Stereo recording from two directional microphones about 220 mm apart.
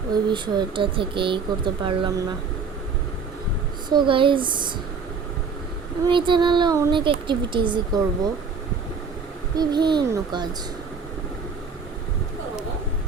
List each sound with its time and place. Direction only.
0.3 s speech: 20° right (ahead or behind)
3.8 s speech: 20° right (ahead or behind)
6.1 s speech: 20° right (ahead or behind)
9.6 s speech: 20° right (ahead or behind)